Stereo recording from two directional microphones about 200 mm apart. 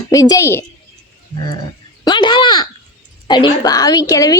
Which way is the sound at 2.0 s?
20° left (ahead or behind).